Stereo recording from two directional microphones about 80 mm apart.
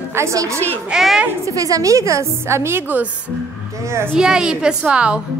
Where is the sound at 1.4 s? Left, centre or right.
Right.